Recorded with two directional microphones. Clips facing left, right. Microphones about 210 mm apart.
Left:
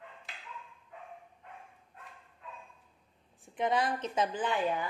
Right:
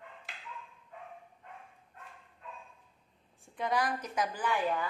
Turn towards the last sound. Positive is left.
turn(degrees=20)  # may be behind; listen again after turning